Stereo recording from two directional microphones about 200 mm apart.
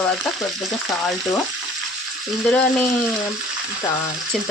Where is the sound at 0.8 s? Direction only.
Centre (ahead or behind).